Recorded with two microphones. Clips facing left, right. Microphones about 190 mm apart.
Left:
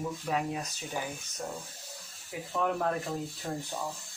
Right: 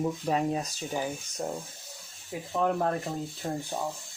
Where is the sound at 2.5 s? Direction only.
25° right (ahead or behind).